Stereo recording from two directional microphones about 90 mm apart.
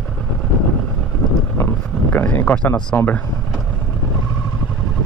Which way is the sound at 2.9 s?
20° left (ahead or behind).